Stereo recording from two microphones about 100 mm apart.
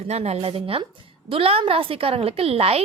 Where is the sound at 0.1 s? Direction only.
90° right.